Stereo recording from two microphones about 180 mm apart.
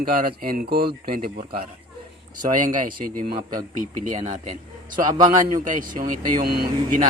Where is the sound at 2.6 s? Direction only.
50° right (ahead or behind).